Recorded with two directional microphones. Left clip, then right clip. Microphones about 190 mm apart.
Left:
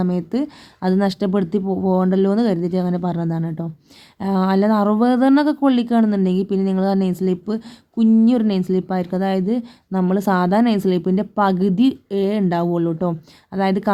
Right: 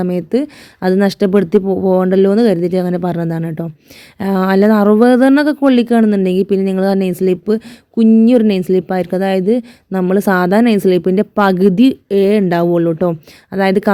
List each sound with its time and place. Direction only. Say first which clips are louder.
0.0 s speech: right 6 dB; 35° right (ahead or behind)